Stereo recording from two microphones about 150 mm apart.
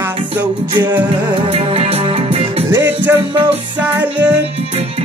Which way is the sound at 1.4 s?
40° right (ahead or behind).